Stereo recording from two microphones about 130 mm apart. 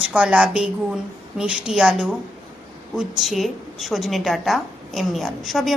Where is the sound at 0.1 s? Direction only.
10° right (ahead or behind).